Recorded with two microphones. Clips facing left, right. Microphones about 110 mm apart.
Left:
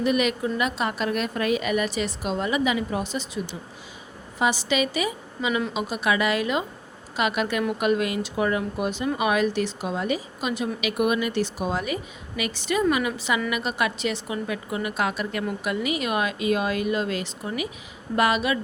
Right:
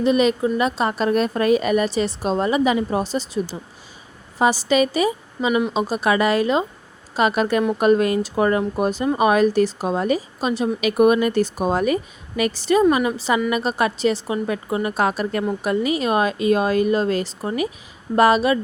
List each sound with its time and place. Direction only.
0.0 s a woman's voice: 30° right (ahead or behind)